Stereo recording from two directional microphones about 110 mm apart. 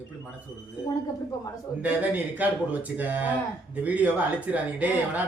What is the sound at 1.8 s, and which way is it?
Speech, 15° right (ahead or behind).